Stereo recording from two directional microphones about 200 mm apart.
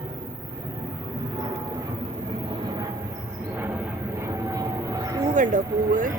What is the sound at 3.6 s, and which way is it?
Vehicle, 10° right (ahead or behind).